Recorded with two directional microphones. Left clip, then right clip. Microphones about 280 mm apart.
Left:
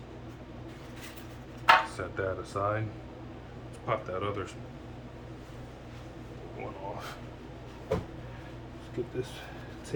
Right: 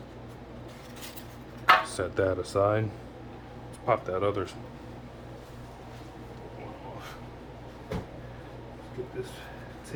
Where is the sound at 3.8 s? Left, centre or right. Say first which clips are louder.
Right 6 dB; right.